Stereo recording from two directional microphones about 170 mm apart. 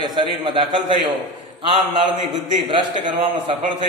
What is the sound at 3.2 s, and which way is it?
Speech, 35° right (ahead or behind).